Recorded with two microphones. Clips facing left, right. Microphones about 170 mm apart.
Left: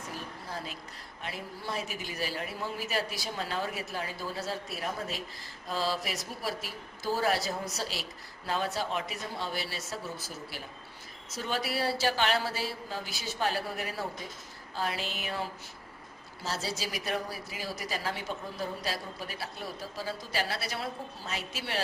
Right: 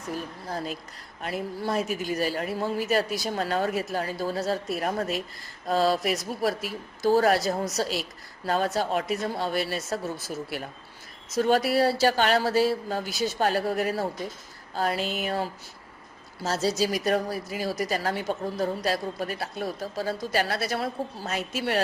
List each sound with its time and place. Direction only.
0.5 s a woman's voice: 40° right (ahead or behind)
4.8 s speech: 60° right (ahead or behind)
7.2 s a woman's voice: 50° right (ahead or behind)
11.3 s a woman's voice: 50° right (ahead or behind)